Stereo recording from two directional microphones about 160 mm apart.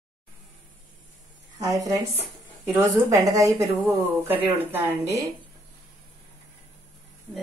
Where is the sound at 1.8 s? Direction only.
20° right (ahead or behind).